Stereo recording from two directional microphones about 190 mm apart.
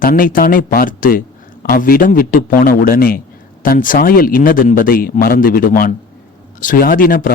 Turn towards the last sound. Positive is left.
turn(degrees=50)  # may be behind; listen again after turning